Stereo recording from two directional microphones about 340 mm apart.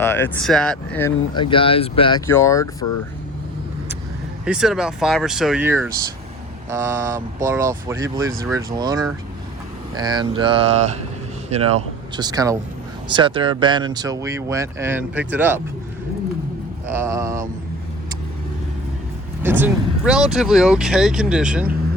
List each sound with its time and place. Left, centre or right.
0.0 s speech: centre
4.4 s speech: centre
16.9 s speech: centre
19.4 s speech: centre